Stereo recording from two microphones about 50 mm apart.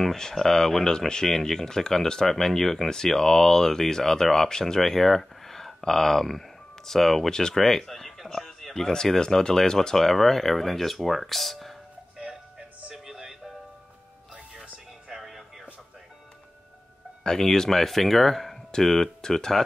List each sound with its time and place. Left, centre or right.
0.0 s speech: centre
12.2 s music: centre
17.2 s speech: centre